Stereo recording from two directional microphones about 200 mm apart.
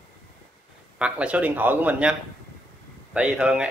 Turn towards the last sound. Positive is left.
turn(degrees=-10)  # may be behind; listen again after turning